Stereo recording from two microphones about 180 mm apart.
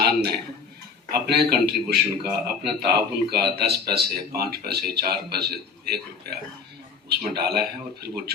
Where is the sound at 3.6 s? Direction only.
65° right (ahead or behind).